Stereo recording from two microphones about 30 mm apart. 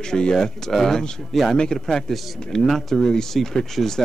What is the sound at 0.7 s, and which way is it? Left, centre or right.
Speech, centre.